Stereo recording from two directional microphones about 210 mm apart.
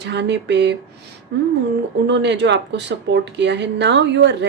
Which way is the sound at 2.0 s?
55° right (ahead or behind).